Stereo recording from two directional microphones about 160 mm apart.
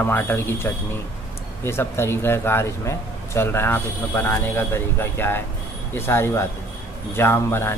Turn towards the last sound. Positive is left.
turn(degrees=15)  # may be behind; listen again after turning